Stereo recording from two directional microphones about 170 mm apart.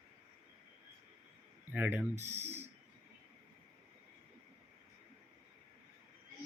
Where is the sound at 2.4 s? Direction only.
40° right (ahead or behind).